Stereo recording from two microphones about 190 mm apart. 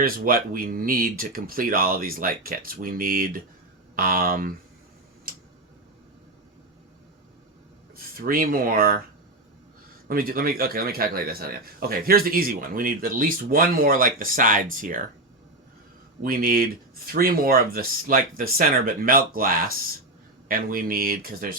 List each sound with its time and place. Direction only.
0.0 s a man's voice: 50° right (ahead or behind)
5.3 s tick-tock: 50° right (ahead or behind)
7.9 s speech: 50° right (ahead or behind)
10.1 s a man's voice: 50° right (ahead or behind)
16.2 s a man's voice: 50° right (ahead or behind)